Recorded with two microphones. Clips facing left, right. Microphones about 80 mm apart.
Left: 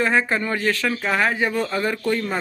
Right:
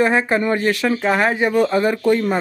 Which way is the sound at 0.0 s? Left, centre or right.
Centre.